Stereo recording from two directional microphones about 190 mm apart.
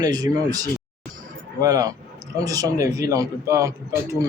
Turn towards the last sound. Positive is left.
turn(degrees=-15)  # may be behind; listen again after turning